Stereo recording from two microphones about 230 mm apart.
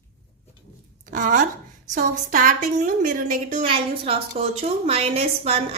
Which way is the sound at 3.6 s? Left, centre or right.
Right.